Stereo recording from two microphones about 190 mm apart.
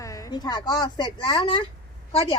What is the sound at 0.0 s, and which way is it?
A woman's voice, 15° left (ahead or behind).